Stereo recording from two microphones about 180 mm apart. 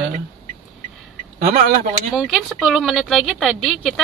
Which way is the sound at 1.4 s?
50° right (ahead or behind).